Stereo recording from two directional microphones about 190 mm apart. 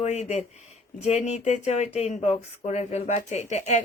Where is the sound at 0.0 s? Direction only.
35° left (ahead or behind).